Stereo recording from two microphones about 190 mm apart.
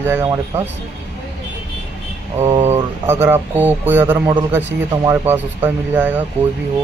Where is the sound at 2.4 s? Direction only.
20° right (ahead or behind).